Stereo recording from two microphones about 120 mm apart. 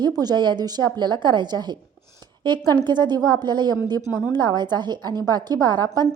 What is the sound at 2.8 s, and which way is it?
A woman's voice, 35° right (ahead or behind).